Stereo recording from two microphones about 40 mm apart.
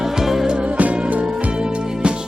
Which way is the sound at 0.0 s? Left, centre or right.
Centre.